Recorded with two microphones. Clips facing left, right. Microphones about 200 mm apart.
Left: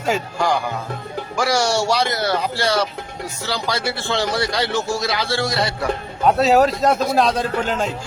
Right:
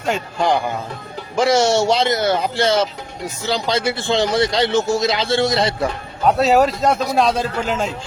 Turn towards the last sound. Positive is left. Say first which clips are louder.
# even
turn(degrees=0)  # may be behind; listen again after turning